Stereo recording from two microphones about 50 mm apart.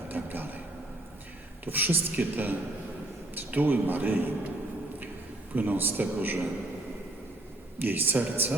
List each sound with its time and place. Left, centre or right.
0.1 s a sound: right
1.6 s a man's voice: right
5.5 s a man's voice: right
7.8 s a man's voice: right